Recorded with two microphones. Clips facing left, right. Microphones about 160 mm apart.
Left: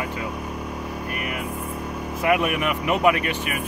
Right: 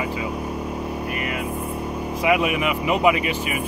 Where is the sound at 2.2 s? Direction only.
5° right (ahead or behind).